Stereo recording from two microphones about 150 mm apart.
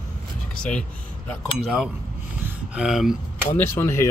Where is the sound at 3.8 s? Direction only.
15° left (ahead or behind).